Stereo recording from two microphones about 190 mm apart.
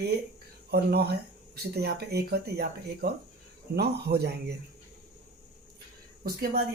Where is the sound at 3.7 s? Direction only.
60° right (ahead or behind).